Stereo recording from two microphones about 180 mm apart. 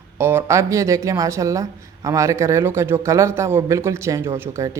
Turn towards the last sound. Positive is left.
turn(degrees=-15)  # may be behind; listen again after turning